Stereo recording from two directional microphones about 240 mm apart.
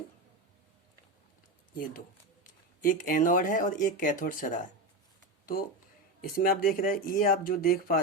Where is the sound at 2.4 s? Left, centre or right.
Left.